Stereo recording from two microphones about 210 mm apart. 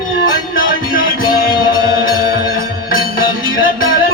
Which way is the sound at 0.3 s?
40° left (ahead or behind).